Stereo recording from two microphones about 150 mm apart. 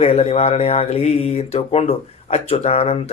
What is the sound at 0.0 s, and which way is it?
Speech, 45° left (ahead or behind).